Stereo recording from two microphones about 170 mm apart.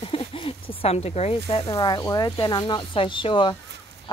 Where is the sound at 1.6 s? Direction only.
20° left (ahead or behind).